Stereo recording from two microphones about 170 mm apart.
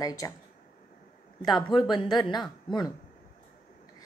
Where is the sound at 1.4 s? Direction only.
25° left (ahead or behind).